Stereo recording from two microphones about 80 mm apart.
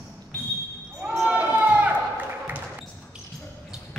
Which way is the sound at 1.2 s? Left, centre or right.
Centre.